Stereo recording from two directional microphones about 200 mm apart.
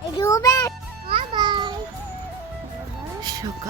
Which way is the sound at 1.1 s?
25° right (ahead or behind).